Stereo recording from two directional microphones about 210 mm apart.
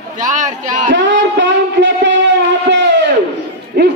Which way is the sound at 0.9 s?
60° right (ahead or behind).